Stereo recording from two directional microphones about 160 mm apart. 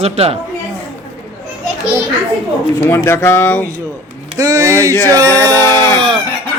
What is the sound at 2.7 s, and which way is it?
Speech, 15° left (ahead or behind).